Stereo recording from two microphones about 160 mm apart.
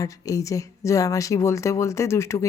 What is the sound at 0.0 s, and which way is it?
Speech, 20° left (ahead or behind).